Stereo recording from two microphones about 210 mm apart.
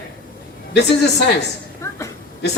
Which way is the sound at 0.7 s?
55° left (ahead or behind).